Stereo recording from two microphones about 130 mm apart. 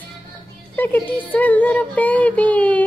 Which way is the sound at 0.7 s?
15° left (ahead or behind).